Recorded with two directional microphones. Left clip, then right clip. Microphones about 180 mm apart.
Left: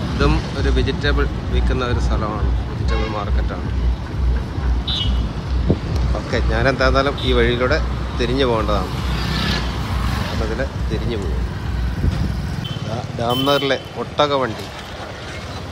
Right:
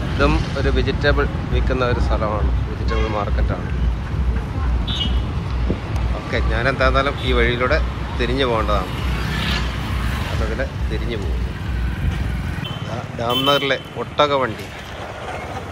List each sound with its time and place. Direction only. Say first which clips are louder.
0.2 s speech: right 2 dB; 10° left (ahead or behind)
6.3 s speech: left 2 dB; 25° left (ahead or behind)
13.5 s speech: even; 20° left (ahead or behind)